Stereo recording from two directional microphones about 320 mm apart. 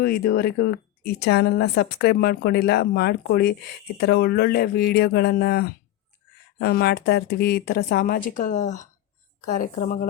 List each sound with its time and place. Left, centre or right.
0.0 s speech: left